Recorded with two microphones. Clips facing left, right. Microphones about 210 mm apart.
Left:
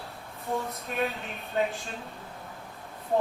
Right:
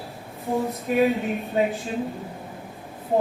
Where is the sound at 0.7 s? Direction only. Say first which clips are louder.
Right 10 dB; 15° right (ahead or behind).